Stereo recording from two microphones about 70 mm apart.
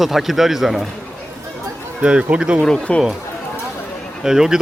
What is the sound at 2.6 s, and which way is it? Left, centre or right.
Speech, centre.